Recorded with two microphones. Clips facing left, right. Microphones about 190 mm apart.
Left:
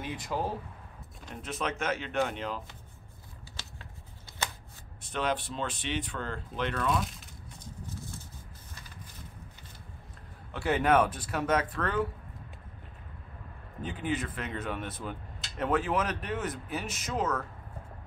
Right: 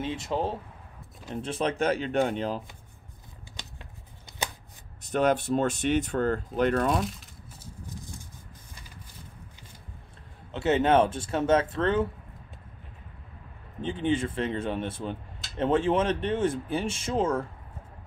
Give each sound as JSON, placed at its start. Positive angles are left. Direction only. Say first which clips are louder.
{"t": 0.0, "sound": "speech", "louder": "right 4 dB", "side_deg": -25}
{"t": 5.0, "sound": "speech", "louder": "right 7 dB", "side_deg": -45}
{"t": 7.1, "sound": "a sound", "louder": "right 5 dB", "side_deg": -5}
{"t": 10.5, "sound": "speech", "louder": "right 3 dB", "side_deg": -25}
{"t": 13.7, "sound": "speech", "louder": "right 6 dB", "side_deg": -25}